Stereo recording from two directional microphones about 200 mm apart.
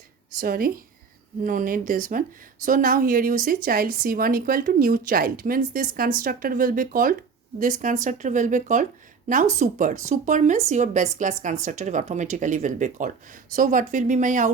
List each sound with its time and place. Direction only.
0.3 s speech: 45° right (ahead or behind)